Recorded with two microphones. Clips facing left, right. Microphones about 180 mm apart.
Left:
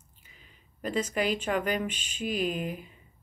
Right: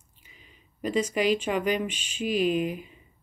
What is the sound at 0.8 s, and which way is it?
Speech, 10° right (ahead or behind).